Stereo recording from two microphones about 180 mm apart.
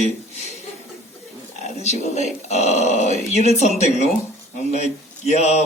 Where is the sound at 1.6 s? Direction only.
40° left (ahead or behind).